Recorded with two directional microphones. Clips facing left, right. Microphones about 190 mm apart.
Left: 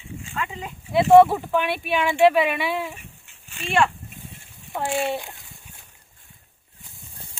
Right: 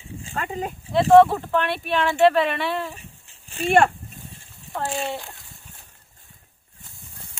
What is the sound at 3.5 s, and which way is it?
Speech, 40° right (ahead or behind).